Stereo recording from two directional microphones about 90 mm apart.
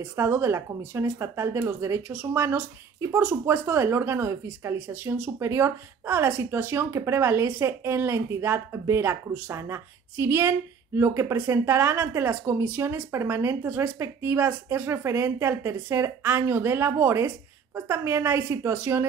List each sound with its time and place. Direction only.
0.0 s speech: 30° right (ahead or behind)